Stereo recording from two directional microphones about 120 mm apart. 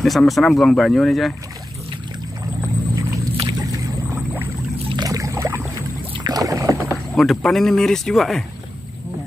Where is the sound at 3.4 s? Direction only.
30° right (ahead or behind).